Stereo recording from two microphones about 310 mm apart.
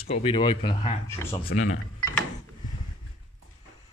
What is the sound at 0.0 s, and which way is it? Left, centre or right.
Speech, centre.